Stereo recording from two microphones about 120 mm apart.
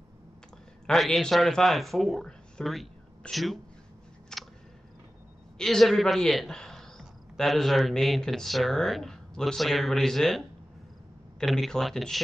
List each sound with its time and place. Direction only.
0.8 s speech: centre (ahead or behind)
4.3 s a sound: 5° left (ahead or behind)
5.6 s a man's voice: 5° left (ahead or behind)